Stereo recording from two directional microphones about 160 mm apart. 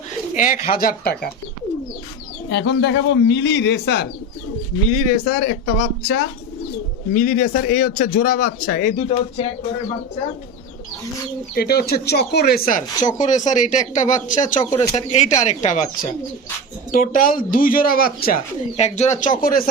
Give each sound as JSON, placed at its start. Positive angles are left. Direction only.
{"t": 0.3, "sound": "speech", "side_deg": 55}
{"t": 0.7, "sound": "speech", "side_deg": 65}
{"t": 2.5, "sound": "speech", "side_deg": 90}
{"t": 4.9, "sound": "speech", "side_deg": 50}
{"t": 7.1, "sound": "a man's voice", "side_deg": 55}
{"t": 11.5, "sound": "speech", "side_deg": 75}
{"t": 16.9, "sound": "a man's voice", "side_deg": 60}
{"t": 18.8, "sound": "speech", "side_deg": 45}
{"t": 19.4, "sound": "a man's voice", "side_deg": 60}